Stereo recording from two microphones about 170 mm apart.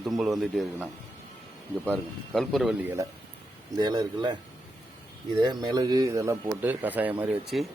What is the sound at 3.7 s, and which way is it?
Speech, 25° right (ahead or behind).